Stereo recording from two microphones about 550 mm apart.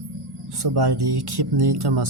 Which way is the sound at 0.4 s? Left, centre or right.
Right.